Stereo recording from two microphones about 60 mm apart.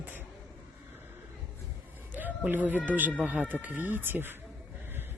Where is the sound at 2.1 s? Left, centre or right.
Right.